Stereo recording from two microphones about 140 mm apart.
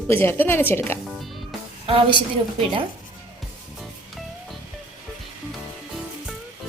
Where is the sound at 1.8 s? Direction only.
40° right (ahead or behind).